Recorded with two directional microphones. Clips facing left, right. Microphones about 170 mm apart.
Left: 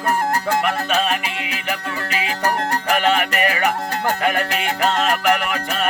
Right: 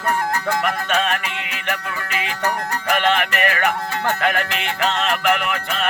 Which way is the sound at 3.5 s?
15° left (ahead or behind).